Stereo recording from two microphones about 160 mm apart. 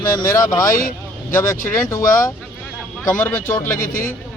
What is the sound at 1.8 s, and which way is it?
Speech, 20° left (ahead or behind).